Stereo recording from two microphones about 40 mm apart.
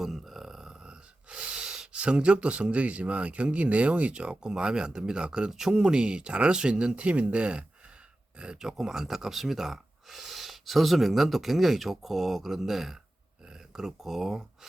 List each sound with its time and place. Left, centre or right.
0.0 s a sound: centre; by 1.8 s right
1.9 s speech: right
5.5 s speech: centre
5.8 s speech: right
6.9 s speech: right
8.5 s speech: centre